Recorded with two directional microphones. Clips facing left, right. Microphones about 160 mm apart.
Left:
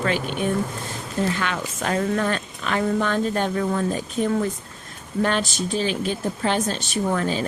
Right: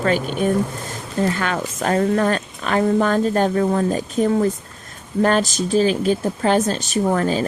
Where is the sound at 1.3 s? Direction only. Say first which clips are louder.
Right 4 dB; 45° right (ahead or behind).